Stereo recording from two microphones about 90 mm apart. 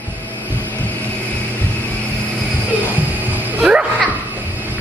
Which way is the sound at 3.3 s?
10° right (ahead or behind).